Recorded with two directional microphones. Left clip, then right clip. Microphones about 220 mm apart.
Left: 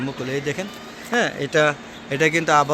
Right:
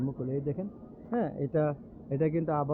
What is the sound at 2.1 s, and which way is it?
Speech, 5° left (ahead or behind).